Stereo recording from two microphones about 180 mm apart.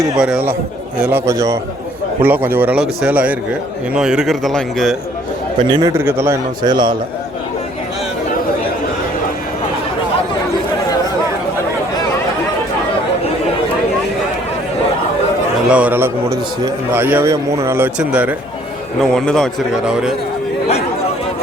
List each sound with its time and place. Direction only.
0.2 s a man's voice: 5° right (ahead or behind)
5.6 s a man's voice: 25° right (ahead or behind)
5.9 s a man's voice: 15° right (ahead or behind)
15.7 s a man's voice: 10° right (ahead or behind)
19.1 s a man's voice: 5° left (ahead or behind)